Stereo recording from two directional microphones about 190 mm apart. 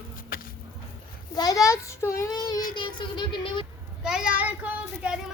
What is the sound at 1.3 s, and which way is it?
A child's voice, 20° left (ahead or behind).